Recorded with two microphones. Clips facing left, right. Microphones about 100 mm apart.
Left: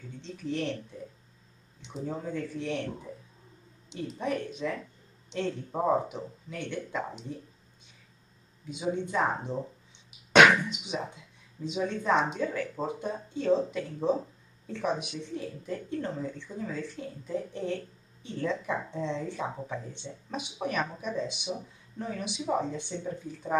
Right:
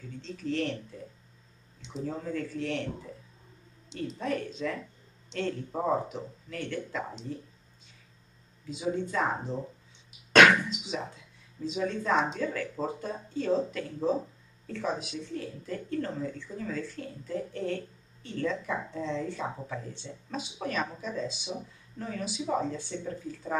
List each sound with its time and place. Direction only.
0.2 s speech: 15° left (ahead or behind)
0.9 s a sound: 15° left (ahead or behind)
2.0 s speech: 15° left (ahead or behind)
3.9 s speech: 15° left (ahead or behind)
8.6 s speech: 20° left (ahead or behind)